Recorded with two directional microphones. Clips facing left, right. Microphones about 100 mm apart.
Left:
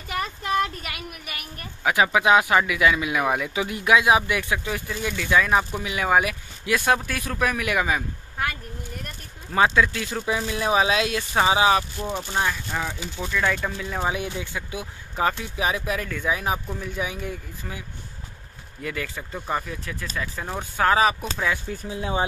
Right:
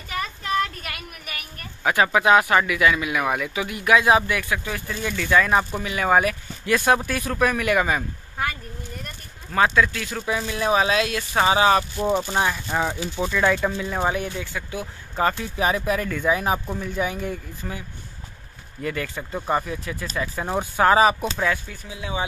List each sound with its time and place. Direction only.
0.2 s a sound: 15° left (ahead or behind)
1.8 s speech: 5° left (ahead or behind); by 3.9 s 25° left (ahead or behind)
3.9 s speech: 15° left (ahead or behind)
9.5 s speech: 15° left (ahead or behind)
12.3 s speech: 15° right (ahead or behind)
12.7 s speech: 25° right (ahead or behind)
13.3 s speech: 10° right (ahead or behind)
14.1 s speech: 10° left (ahead or behind)
21.6 s speech: 35° left (ahead or behind)